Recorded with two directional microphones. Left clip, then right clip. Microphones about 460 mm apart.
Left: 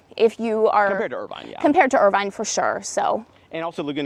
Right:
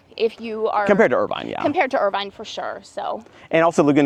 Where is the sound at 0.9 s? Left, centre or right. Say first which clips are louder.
Right 9 dB; right.